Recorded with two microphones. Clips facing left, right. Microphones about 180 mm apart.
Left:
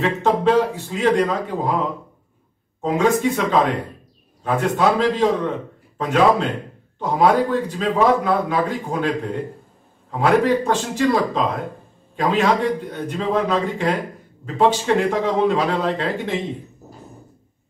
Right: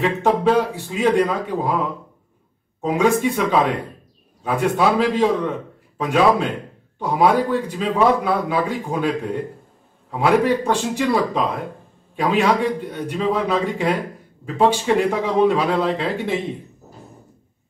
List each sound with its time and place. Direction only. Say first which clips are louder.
0.2 s speech: left 1 dB; 10° right (ahead or behind)